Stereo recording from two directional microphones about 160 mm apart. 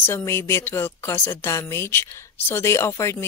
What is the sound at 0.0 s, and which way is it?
Speech, 15° left (ahead or behind).